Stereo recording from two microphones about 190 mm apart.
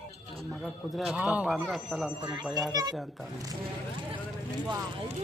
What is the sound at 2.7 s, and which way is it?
Speech, 20° right (ahead or behind).